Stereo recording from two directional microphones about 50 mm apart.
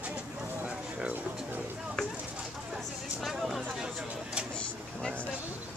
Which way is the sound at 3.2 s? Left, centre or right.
Centre.